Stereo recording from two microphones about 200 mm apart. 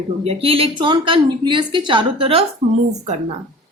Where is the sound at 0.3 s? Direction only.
30° right (ahead or behind).